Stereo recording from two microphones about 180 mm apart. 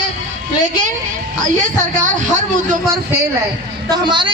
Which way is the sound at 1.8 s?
45° right (ahead or behind).